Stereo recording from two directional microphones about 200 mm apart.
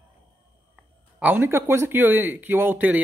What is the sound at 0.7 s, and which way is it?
Speech, 10° right (ahead or behind).